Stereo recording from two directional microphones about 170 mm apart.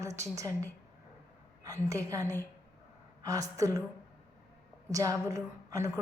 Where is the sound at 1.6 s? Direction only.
20° right (ahead or behind).